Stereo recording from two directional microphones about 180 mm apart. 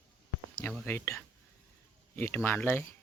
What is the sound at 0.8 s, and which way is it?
Speech, 10° left (ahead or behind).